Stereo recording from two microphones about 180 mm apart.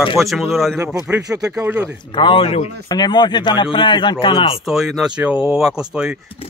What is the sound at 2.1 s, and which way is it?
Speech, 30° left (ahead or behind).